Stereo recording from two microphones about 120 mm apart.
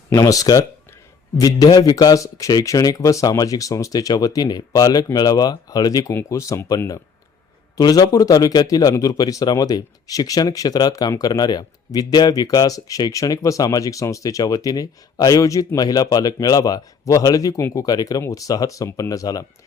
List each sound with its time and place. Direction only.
0.1 s speech: 30° left (ahead or behind)